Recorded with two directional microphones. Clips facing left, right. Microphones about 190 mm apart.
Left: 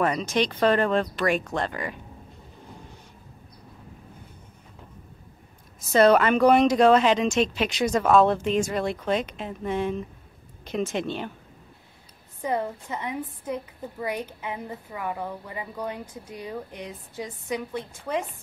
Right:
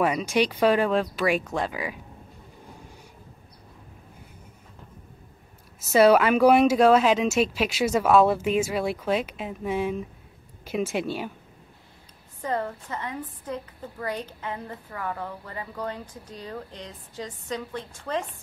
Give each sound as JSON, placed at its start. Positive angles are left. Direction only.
{"t": 0.0, "sound": "speech", "side_deg": -10}
{"t": 5.8, "sound": "speech", "side_deg": -5}
{"t": 12.4, "sound": "a woman's voice", "side_deg": 15}